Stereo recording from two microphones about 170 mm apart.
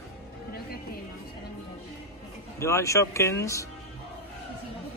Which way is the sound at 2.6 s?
15° left (ahead or behind).